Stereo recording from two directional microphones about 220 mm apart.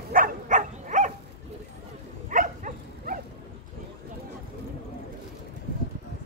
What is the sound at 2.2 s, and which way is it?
Dog, 35° right (ahead or behind).